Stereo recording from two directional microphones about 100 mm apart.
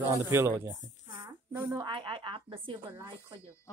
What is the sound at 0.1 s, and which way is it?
Speech, 35° right (ahead or behind).